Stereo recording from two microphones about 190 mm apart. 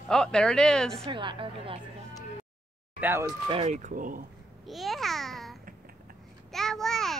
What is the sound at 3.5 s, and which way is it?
Speech, 35° right (ahead or behind).